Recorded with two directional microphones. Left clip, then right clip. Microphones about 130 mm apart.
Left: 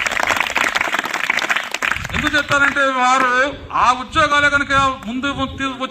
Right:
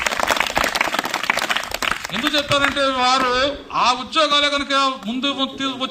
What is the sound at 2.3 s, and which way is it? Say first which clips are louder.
A man's voice: left 3 dB; 25° right (ahead or behind).